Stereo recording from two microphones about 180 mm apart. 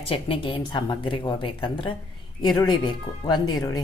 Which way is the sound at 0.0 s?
30° left (ahead or behind).